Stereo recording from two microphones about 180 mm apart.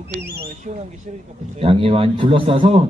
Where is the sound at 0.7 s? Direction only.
40° right (ahead or behind).